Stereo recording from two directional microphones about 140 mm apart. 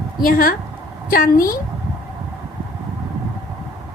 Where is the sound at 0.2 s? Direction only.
90° left.